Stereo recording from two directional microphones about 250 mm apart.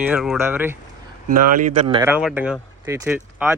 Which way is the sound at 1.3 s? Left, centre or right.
Right.